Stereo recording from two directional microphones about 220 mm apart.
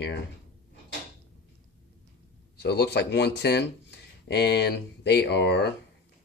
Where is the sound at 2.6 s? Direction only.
50° left (ahead or behind).